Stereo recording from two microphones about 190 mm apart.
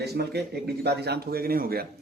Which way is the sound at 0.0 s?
60° right (ahead or behind).